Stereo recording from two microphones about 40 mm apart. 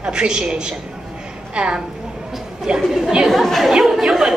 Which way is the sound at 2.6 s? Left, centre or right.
Centre.